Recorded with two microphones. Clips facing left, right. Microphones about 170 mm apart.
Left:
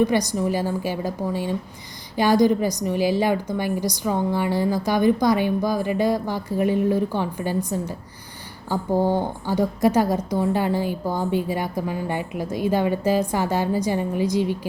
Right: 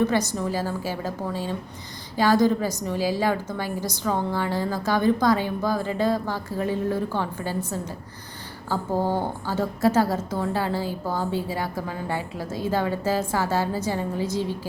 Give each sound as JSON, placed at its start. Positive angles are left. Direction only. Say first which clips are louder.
{"t": 0.0, "sound": "a woman's voice", "louder": "left 3 dB", "side_deg": 15}